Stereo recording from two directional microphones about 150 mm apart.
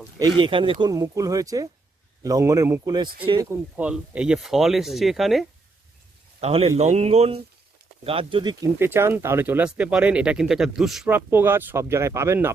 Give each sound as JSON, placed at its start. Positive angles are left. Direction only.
{"t": 0.2, "sound": "speech", "side_deg": -30}
{"t": 3.5, "sound": "speech", "side_deg": -10}
{"t": 6.4, "sound": "speech", "side_deg": -45}
{"t": 8.6, "sound": "speech", "side_deg": -15}
{"t": 11.1, "sound": "speech", "side_deg": -15}